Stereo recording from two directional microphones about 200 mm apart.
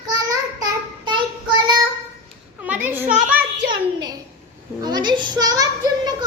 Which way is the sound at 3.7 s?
20° right (ahead or behind).